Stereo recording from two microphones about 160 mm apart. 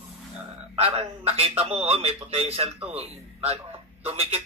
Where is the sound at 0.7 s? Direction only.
35° right (ahead or behind).